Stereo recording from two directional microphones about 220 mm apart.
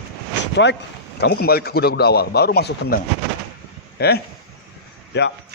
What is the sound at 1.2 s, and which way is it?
Speech, 45° left (ahead or behind).